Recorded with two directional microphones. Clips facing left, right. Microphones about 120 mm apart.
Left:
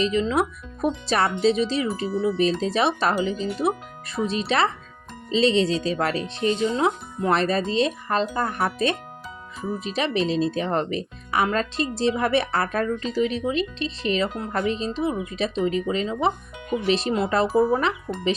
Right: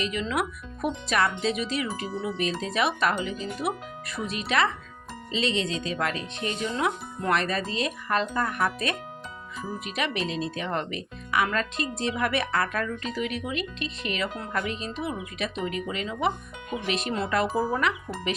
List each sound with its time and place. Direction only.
0.0 s speech: 30° left (ahead or behind)